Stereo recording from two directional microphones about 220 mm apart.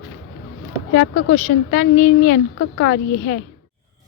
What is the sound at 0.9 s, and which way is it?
Speech, 55° left (ahead or behind).